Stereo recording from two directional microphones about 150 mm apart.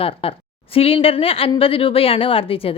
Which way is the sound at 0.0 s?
40° left (ahead or behind).